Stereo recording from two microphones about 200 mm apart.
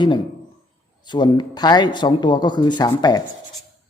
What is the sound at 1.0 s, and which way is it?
Speech, 20° left (ahead or behind).